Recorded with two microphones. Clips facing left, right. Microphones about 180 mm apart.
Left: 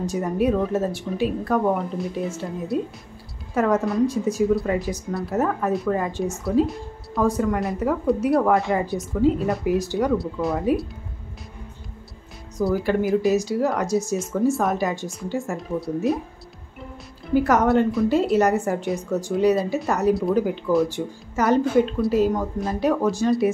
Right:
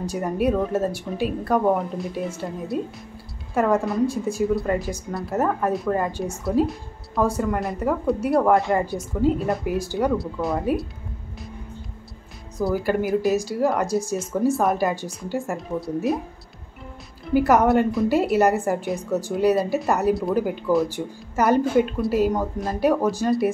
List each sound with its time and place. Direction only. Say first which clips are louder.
0.1 s a woman's voice: even; centre (ahead or behind)
12.6 s a woman's voice: left 1 dB; centre (ahead or behind)
17.3 s a woman's voice: right 1 dB; 10° right (ahead or behind)